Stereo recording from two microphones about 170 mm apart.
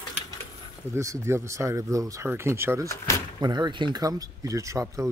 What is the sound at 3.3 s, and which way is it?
Speech, 25° right (ahead or behind).